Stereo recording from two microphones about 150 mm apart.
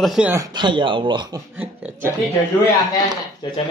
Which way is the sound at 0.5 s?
30° right (ahead or behind).